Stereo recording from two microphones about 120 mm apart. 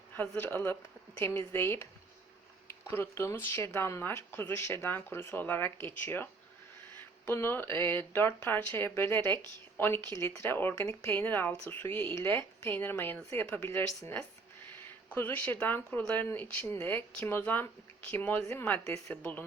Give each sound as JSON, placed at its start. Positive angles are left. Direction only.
{"t": 0.2, "sound": "speech", "side_deg": 15}
{"t": 7.3, "sound": "speech", "side_deg": 20}
{"t": 15.1, "sound": "speech", "side_deg": 15}